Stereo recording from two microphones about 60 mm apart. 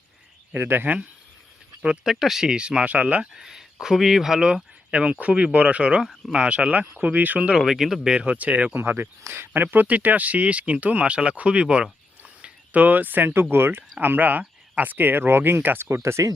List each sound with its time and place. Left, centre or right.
0.5 s speech: right
1.8 s speech: centre
3.3 s speech: centre; by 7.5 s right
7.5 s speech: centre
8.1 s speech: centre
8.7 s speech: right
15.9 s speech: right